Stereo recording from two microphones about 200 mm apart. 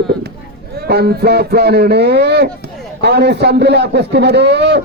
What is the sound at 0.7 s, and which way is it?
Speech, 50° right (ahead or behind).